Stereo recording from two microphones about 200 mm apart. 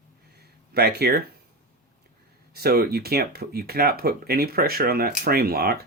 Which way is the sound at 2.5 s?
50° right (ahead or behind).